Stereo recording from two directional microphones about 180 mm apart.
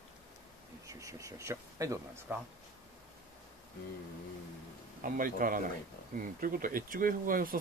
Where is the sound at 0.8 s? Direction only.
15° right (ahead or behind).